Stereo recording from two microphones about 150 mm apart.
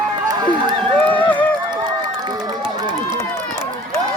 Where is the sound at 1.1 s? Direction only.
10° left (ahead or behind).